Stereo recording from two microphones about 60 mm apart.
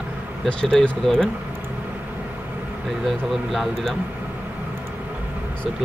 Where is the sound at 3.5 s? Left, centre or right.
Centre.